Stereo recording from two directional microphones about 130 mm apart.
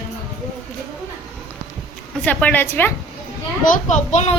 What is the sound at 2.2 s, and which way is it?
Speech, 10° left (ahead or behind).